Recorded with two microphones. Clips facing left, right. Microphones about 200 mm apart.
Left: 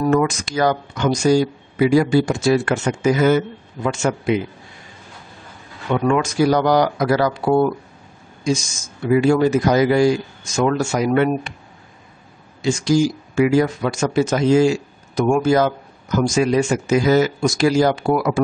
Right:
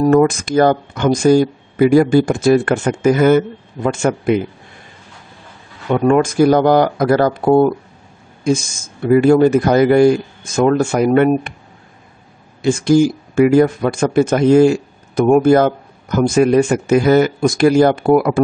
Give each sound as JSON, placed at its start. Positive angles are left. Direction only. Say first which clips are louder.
{"t": 0.1, "sound": "speech", "louder": "right 6 dB", "side_deg": -55}
{"t": 5.9, "sound": "speech", "louder": "right 5 dB", "side_deg": -45}
{"t": 12.6, "sound": "speech", "louder": "right 5 dB", "side_deg": -55}